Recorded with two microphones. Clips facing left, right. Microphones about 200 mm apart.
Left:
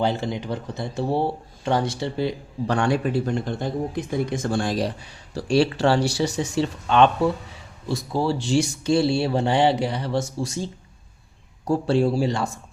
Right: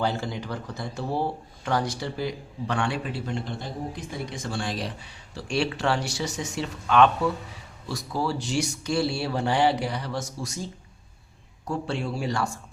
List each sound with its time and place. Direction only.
0.0 s speech: 20° left (ahead or behind)
2.7 s speech: 40° left (ahead or behind)
11.7 s speech: 35° left (ahead or behind)